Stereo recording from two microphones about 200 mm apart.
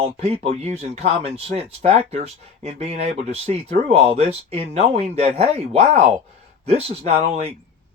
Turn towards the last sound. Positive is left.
turn(degrees=-30)  # may be behind; listen again after turning